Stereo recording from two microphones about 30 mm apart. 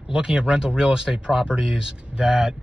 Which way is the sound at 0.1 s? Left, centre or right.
Right.